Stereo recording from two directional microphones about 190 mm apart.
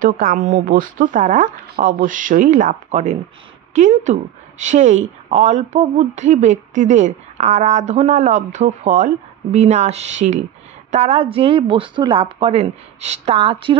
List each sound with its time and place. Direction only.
0.0 s a woman's voice: 45° right (ahead or behind); by 13.7 s 30° right (ahead or behind)